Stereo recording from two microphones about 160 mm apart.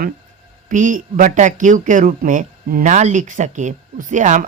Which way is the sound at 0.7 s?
55° right (ahead or behind).